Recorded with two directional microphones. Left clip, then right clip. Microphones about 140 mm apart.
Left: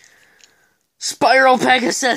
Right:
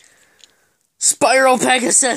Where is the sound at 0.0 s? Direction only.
10° right (ahead or behind).